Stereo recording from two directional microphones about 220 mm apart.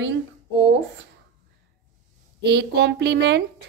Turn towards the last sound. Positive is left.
turn(degrees=-50)  # may be behind; listen again after turning